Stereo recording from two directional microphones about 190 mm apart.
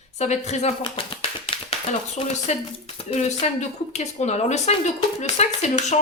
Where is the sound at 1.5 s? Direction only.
30° left (ahead or behind).